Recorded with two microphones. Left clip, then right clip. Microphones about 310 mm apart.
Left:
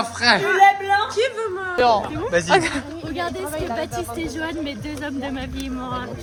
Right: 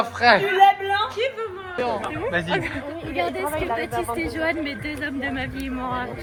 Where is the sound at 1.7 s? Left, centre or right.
Left.